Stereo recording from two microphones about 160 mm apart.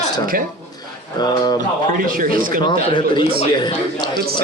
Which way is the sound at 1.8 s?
60° right (ahead or behind).